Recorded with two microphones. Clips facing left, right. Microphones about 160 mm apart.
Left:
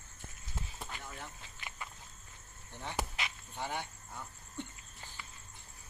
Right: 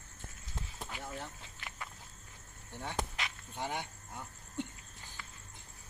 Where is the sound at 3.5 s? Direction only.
15° right (ahead or behind).